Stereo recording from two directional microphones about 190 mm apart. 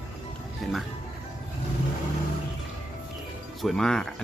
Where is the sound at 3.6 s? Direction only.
5° left (ahead or behind).